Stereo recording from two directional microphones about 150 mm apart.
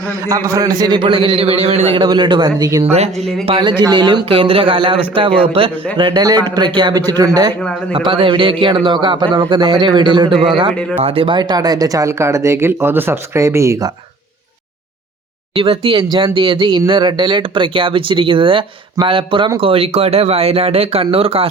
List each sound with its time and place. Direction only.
0.1 s speech: 20° right (ahead or behind); by 2.0 s 45° right (ahead or behind)
2.0 s speech: 30° right (ahead or behind)
2.9 s speech: 45° right (ahead or behind)
3.4 s speech: 35° right (ahead or behind)
15.5 s speech: 40° right (ahead or behind)